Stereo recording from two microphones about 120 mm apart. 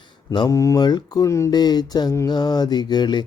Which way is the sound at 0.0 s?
35° left (ahead or behind).